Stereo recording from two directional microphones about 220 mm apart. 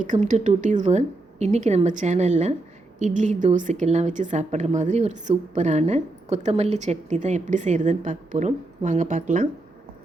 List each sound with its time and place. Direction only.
0.0 s a woman's voice: 35° right (ahead or behind)